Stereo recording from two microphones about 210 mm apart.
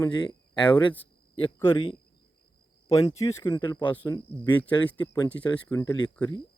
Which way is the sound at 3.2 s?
15° left (ahead or behind).